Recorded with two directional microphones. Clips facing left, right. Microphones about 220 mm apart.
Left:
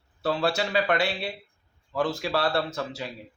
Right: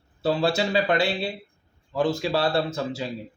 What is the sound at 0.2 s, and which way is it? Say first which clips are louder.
A man's voice: right 3 dB; 25° right (ahead or behind).